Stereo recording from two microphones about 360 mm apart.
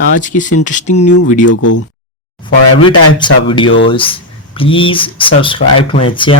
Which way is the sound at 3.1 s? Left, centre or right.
Centre.